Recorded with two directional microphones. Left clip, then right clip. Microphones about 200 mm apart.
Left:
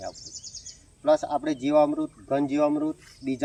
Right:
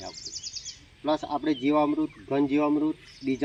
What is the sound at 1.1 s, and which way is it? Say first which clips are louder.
Speech: left 4 dB; 15° left (ahead or behind).